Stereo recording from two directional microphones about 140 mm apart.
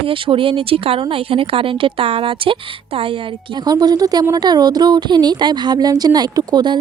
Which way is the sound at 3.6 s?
30° right (ahead or behind).